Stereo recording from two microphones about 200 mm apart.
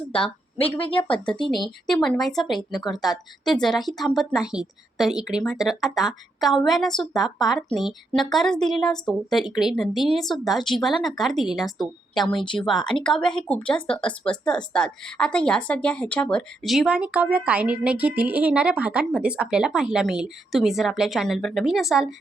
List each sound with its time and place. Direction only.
0.1 s speech: 25° left (ahead or behind)
1.5 s a woman's voice: centre (ahead or behind)